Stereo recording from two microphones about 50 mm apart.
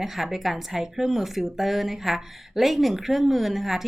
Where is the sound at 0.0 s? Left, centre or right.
Centre.